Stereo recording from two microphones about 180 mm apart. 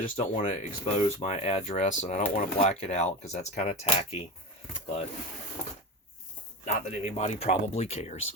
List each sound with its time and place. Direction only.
0.2 s speech: 35° left (ahead or behind)
6.7 s speech: 40° left (ahead or behind)